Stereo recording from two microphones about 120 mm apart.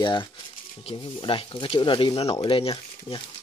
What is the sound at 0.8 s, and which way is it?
Speech, 50° left (ahead or behind).